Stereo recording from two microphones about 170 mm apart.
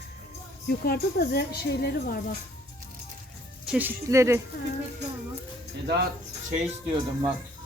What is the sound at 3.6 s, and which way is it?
Speech, 5° right (ahead or behind).